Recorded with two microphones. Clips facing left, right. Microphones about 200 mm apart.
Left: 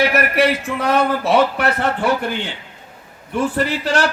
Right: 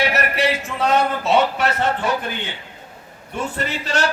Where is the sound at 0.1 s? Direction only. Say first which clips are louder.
Left 4 dB; 55° left (ahead or behind).